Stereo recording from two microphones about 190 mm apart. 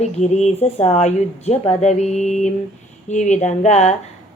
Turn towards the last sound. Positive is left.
turn(degrees=35)  # may be behind; listen again after turning